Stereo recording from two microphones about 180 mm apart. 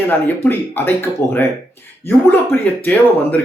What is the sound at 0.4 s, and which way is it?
Speech, 10° left (ahead or behind).